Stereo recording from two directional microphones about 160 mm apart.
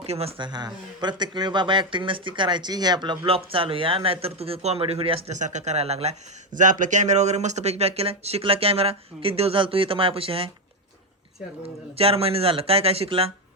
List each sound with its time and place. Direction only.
0.0 s speech: 40° right (ahead or behind)
11.9 s speech: 35° right (ahead or behind)